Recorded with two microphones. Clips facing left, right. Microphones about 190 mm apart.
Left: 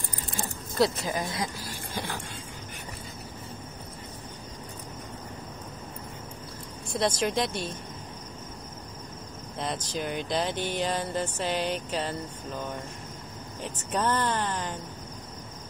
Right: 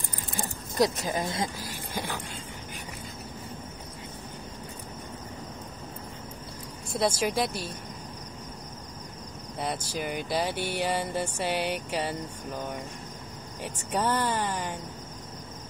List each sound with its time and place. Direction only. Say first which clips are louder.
0.7 s speech: even; 20° right (ahead or behind)
6.9 s speech: even; 5° right (ahead or behind)
9.6 s speech: even; 5° right (ahead or behind)
13.6 s speech: even; 10° right (ahead or behind)